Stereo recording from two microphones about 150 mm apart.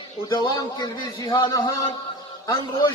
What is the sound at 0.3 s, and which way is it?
Speech, 25° left (ahead or behind).